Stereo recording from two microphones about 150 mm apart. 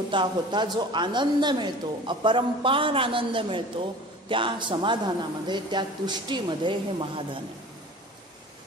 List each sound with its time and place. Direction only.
0.1 s a woman's voice: 30° right (ahead or behind)